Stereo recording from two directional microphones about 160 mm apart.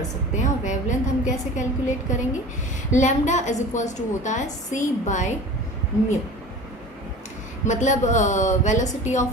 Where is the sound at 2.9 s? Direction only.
50° left (ahead or behind).